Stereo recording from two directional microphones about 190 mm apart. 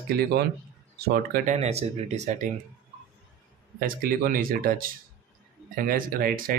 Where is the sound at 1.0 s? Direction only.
40° right (ahead or behind).